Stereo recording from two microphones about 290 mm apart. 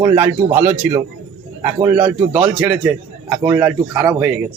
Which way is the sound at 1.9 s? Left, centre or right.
Centre.